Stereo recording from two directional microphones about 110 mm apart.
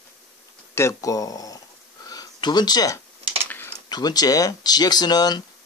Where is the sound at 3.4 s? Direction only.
20° left (ahead or behind).